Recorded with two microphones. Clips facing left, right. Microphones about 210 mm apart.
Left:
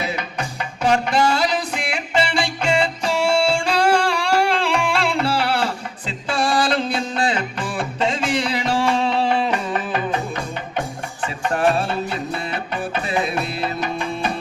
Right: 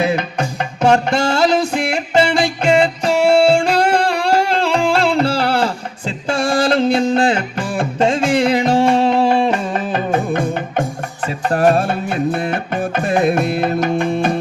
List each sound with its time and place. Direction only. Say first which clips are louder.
0.0 s music: right 8 dB; 50° right (ahead or behind)
11.4 s music: right 5 dB; 40° right (ahead or behind)